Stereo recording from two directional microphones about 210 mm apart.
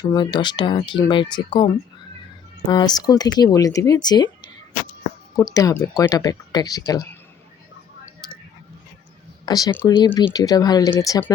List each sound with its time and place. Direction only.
0.1 s speech: 20° left (ahead or behind)
5.5 s speech: 15° left (ahead or behind)
9.5 s speech: 15° left (ahead or behind)